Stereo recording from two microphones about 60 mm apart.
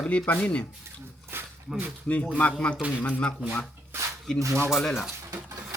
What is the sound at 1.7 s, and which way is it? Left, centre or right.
Speech, centre.